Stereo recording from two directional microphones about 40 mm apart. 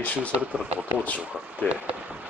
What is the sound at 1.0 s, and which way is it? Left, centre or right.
Speech, left.